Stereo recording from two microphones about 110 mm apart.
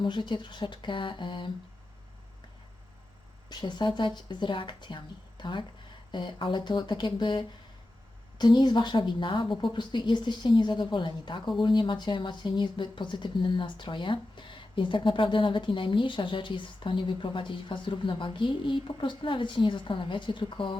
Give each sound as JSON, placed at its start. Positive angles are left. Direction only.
{"t": 0.0, "sound": "speech", "side_deg": 45}
{"t": 3.5, "sound": "speech", "side_deg": 45}